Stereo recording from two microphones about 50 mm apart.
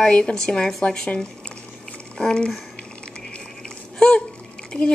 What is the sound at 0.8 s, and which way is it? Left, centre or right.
Boiling, centre.